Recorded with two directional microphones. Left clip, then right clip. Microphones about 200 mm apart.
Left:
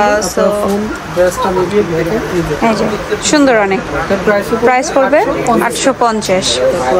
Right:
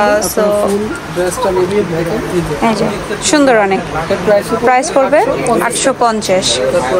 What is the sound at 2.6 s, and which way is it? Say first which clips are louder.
A woman's voice: left 1 dB; 10° left (ahead or behind).